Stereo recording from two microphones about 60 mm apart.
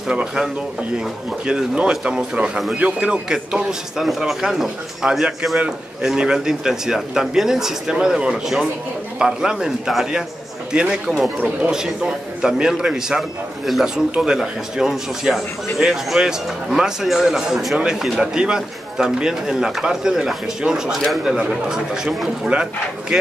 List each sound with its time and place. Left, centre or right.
0.1 s speech: centre
4.0 s speech: centre; by 11.7 s right
11.7 s speech: centre